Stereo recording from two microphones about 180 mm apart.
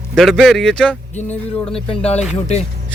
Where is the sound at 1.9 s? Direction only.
35° left (ahead or behind).